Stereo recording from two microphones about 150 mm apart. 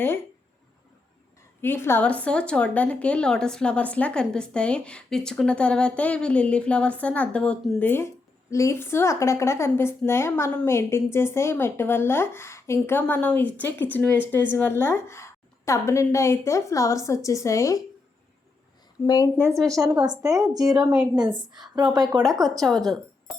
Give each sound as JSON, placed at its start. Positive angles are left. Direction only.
{"t": 1.6, "sound": "a woman's voice", "side_deg": 15}
{"t": 19.0, "sound": "a woman's voice", "side_deg": 25}
{"t": 19.4, "sound": "a woman's voice", "side_deg": -20}